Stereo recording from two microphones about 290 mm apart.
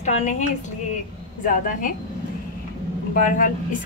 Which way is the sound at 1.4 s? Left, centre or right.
Left.